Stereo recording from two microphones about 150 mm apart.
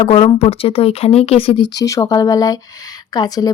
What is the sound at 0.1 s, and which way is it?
A woman's voice, 40° left (ahead or behind).